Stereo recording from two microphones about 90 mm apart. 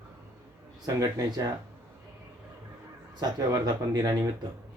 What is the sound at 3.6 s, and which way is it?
Speech, 45° right (ahead or behind).